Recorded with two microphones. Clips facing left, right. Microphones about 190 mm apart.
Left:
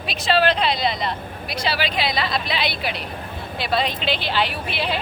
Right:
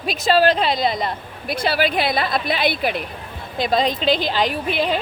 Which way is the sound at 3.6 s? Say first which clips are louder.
Right 4 dB; 40° right (ahead or behind).